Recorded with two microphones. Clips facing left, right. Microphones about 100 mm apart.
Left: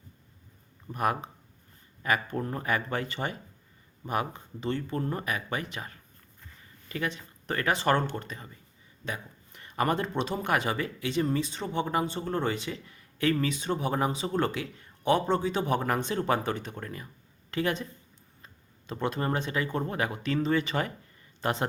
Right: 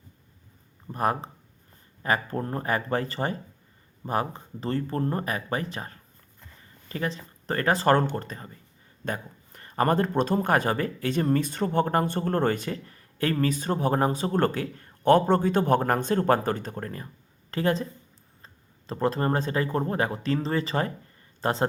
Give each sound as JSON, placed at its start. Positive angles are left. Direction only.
{"t": 0.9, "sound": "speech", "side_deg": -30}